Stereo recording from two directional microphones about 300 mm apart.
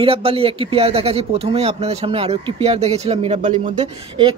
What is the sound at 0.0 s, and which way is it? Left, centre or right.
A man's voice, centre.